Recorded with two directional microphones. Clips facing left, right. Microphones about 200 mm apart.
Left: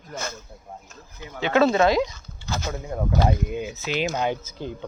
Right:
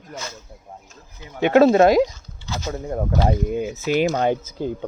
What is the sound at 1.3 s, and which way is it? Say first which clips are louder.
Speech: right 6 dB; 50° right (ahead or behind).